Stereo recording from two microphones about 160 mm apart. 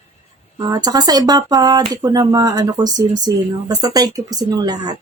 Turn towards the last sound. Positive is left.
turn(degrees=-25)  # may be behind; listen again after turning